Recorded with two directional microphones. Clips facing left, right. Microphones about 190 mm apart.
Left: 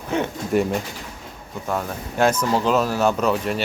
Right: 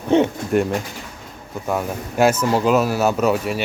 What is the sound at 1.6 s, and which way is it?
Speech, 10° right (ahead or behind).